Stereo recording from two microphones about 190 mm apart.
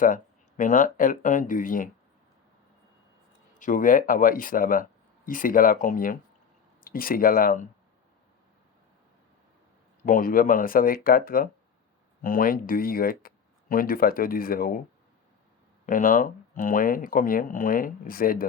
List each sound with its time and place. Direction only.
0.0 s speech: 45° left (ahead or behind)
3.6 s speech: 45° left (ahead or behind)
10.0 s speech: 45° left (ahead or behind)
15.9 s speech: 45° left (ahead or behind)